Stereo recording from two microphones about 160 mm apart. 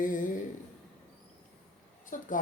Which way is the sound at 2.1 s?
55° left (ahead or behind).